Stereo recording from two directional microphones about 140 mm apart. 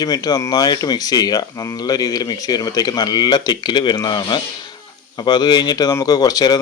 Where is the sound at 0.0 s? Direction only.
30° left (ahead or behind).